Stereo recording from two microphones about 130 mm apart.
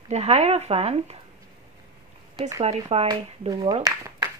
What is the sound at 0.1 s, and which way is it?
Speech, 55° right (ahead or behind).